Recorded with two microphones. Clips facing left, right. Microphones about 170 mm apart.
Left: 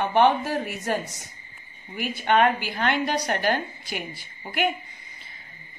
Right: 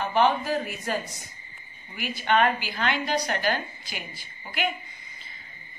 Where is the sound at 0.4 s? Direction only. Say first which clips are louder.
Even; 65° left (ahead or behind).